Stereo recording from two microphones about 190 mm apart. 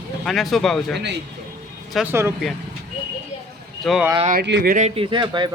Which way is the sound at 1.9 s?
Centre (ahead or behind).